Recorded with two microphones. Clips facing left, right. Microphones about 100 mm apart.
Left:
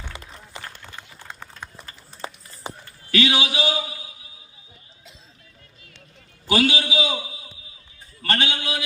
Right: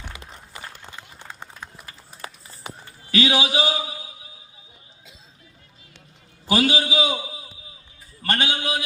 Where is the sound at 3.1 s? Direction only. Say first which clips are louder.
Right 1 dB; 35° right (ahead or behind).